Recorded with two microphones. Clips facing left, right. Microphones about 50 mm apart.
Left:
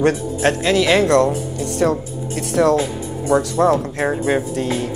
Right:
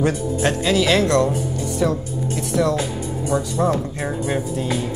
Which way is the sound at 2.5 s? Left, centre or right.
Left.